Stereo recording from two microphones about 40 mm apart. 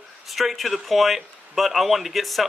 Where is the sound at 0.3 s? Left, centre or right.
Centre.